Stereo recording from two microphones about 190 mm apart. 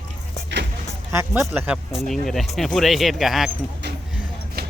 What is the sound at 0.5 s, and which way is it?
Music, 65° right (ahead or behind).